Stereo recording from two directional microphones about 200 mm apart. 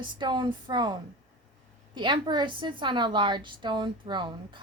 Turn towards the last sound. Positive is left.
turn(degrees=-25)  # may be behind; listen again after turning